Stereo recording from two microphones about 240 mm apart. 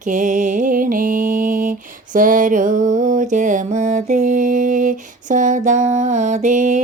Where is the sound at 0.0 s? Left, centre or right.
Right.